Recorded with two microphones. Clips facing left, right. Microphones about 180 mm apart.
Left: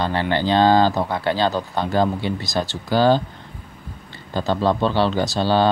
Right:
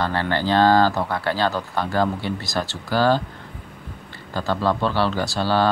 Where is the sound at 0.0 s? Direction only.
20° left (ahead or behind).